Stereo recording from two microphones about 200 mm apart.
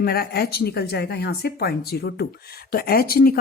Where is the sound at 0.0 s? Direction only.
50° left (ahead or behind).